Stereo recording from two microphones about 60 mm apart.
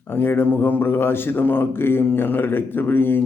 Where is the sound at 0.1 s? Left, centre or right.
Left.